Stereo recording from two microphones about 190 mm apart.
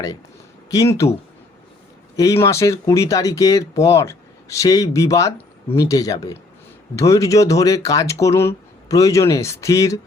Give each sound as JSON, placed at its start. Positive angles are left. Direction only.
{"t": 0.7, "sound": "speech", "side_deg": 15}
{"t": 2.1, "sound": "speech", "side_deg": 15}